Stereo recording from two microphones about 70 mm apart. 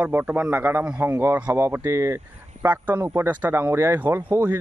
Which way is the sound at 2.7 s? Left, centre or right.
Right.